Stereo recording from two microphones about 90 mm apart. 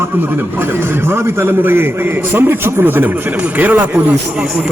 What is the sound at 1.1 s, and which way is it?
A man's voice, 25° right (ahead or behind).